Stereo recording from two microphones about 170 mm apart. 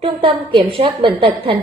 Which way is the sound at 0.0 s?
30° right (ahead or behind).